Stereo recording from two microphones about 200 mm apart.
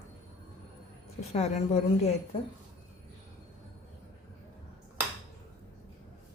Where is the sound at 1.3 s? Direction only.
35° left (ahead or behind).